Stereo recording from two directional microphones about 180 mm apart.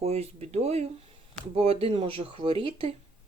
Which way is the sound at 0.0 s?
35° right (ahead or behind).